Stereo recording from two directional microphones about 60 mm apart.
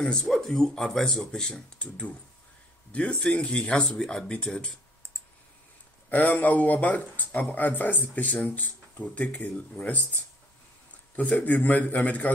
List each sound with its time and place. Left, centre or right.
0.0 s speech: centre
6.0 s speech: left